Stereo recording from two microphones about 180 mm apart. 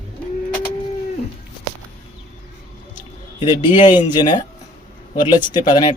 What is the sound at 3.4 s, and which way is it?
Speech, 25° left (ahead or behind).